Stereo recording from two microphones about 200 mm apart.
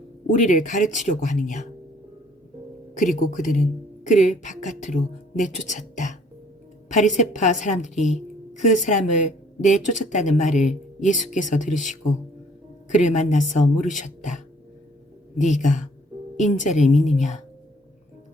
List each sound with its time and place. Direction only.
0.3 s a woman's voice: 40° left (ahead or behind)
3.3 s a woman's voice: 40° left (ahead or behind)